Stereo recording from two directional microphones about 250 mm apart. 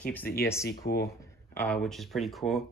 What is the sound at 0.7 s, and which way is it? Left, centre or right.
Speech, left.